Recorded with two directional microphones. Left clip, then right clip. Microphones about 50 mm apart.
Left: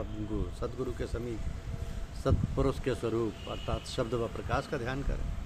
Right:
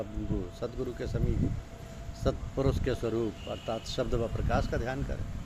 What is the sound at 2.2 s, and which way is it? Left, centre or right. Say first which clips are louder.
Speech: even; left.